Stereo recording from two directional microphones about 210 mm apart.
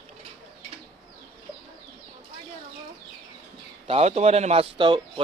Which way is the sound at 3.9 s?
30° right (ahead or behind).